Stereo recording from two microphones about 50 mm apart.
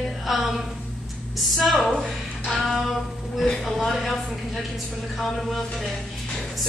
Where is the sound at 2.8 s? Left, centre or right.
Centre.